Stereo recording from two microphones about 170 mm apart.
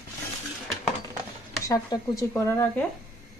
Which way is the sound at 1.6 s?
20° left (ahead or behind).